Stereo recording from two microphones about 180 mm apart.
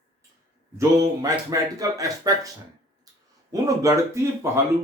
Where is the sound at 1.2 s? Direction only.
20° right (ahead or behind).